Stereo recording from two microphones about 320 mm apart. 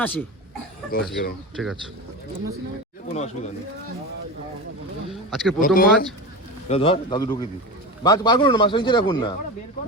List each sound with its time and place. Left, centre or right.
0.0 s a man's voice: centre
0.9 s speech: left
1.6 s a man's voice: centre
3.2 s speech: left
5.1 s a man's voice: centre
5.5 s speech: left